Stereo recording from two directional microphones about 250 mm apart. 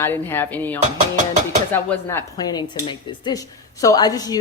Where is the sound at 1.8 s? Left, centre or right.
Centre.